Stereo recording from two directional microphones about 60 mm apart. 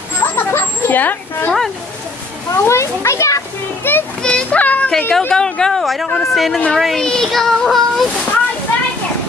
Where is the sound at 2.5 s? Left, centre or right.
Left.